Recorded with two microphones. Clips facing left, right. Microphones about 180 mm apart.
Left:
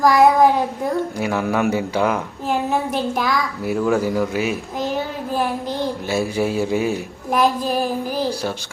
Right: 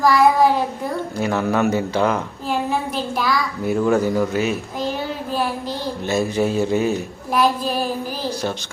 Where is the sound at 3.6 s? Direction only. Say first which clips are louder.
Right 2 dB; 5° left (ahead or behind).